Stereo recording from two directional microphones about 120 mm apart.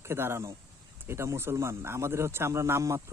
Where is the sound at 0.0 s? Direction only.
20° right (ahead or behind).